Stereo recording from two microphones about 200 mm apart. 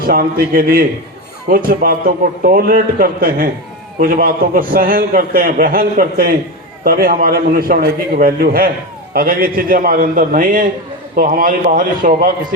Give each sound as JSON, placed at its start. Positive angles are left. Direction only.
{"t": 0.0, "sound": "a man's voice", "side_deg": -45}